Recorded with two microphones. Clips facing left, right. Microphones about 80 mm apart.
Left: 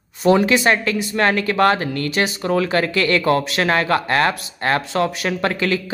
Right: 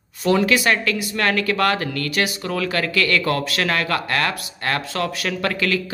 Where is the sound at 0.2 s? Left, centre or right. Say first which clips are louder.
Left 3 dB; left.